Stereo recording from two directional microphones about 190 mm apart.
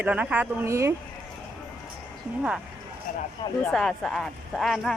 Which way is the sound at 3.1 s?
40° left (ahead or behind).